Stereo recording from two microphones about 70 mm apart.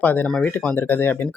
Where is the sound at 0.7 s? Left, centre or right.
Left.